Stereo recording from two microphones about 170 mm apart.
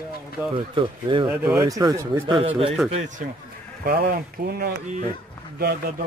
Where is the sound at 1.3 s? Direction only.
5° right (ahead or behind).